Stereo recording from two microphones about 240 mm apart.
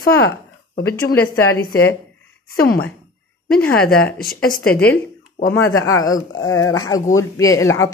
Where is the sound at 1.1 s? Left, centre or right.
Centre.